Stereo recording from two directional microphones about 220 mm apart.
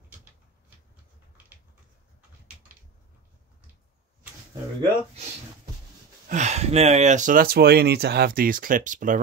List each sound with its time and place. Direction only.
6.2 s speech: 30° right (ahead or behind)